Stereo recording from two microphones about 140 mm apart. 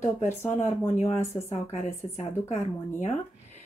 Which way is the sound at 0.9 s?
50° left (ahead or behind).